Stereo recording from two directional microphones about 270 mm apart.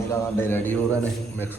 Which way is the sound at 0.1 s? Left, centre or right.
Centre.